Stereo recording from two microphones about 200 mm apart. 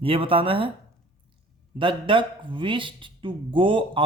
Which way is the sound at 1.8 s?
25° right (ahead or behind).